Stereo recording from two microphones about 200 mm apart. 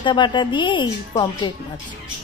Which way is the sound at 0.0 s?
20° left (ahead or behind).